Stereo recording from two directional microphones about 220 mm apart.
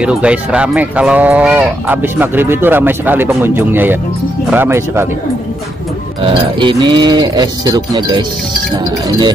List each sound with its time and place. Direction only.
0.0 s speech: 5° right (ahead or behind)
6.2 s speech: 20° right (ahead or behind)